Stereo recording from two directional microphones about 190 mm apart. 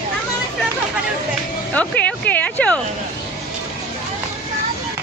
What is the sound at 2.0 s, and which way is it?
Speech, 10° left (ahead or behind).